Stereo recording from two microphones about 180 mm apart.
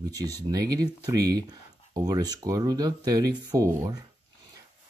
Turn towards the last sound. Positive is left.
turn(degrees=-15)  # may be behind; listen again after turning